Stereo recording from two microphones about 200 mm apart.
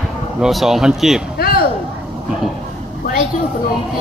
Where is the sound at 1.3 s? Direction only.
50° left (ahead or behind).